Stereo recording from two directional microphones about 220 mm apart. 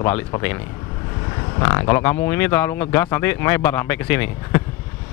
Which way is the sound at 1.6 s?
15° left (ahead or behind).